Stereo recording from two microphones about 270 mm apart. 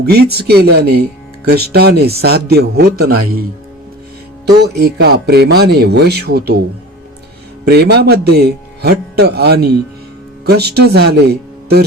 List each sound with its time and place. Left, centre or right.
0.0 s speech: right
4.4 s speech: right
7.6 s a man's voice: right